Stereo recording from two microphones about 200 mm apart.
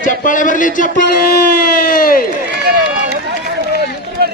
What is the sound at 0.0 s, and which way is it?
Speech, 40° left (ahead or behind).